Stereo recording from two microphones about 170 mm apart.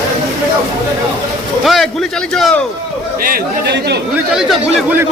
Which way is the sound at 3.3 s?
70° right (ahead or behind).